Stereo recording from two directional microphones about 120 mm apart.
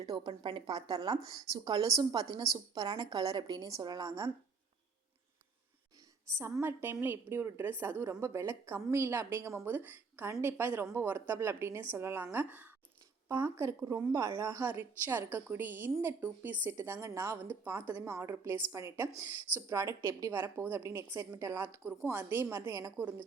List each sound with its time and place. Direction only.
0.0 s speech: 35° right (ahead or behind)
6.3 s a woman's voice: 20° right (ahead or behind)